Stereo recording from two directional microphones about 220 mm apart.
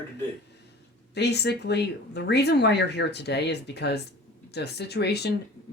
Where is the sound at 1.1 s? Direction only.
50° left (ahead or behind).